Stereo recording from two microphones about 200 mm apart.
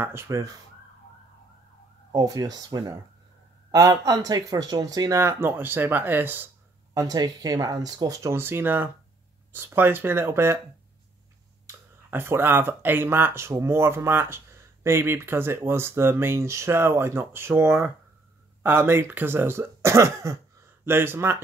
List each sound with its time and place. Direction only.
0.0 s speech: 10° right (ahead or behind)
2.1 s speech: 15° right (ahead or behind)
12.1 s speech: 10° right (ahead or behind)